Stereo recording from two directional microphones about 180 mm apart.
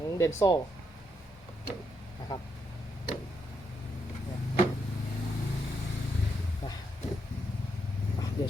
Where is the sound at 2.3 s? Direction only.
20° left (ahead or behind).